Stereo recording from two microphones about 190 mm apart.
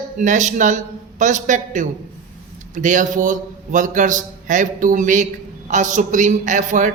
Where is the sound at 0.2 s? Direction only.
40° right (ahead or behind).